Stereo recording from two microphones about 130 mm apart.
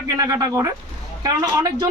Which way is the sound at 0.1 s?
30° right (ahead or behind).